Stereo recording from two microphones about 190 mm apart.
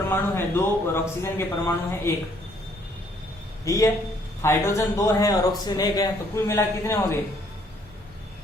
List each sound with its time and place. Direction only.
0.1 s speech: 10° left (ahead or behind)
3.7 s speech: 15° left (ahead or behind)